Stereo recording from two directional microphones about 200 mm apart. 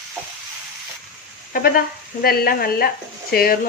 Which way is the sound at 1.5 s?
50° left (ahead or behind).